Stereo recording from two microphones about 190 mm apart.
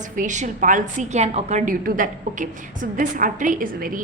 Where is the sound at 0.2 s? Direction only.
40° right (ahead or behind).